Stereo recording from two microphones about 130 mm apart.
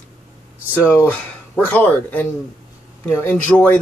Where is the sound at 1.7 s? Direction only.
10° left (ahead or behind).